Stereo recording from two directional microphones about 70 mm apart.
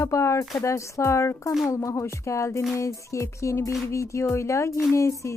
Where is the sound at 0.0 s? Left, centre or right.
Left.